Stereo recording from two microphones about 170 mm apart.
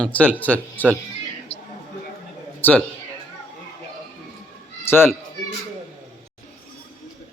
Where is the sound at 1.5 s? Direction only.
40° left (ahead or behind).